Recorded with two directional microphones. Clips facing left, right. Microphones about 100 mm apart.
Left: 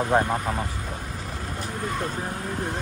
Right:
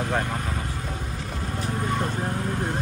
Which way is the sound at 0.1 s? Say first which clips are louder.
Left 7 dB; 15° left (ahead or behind).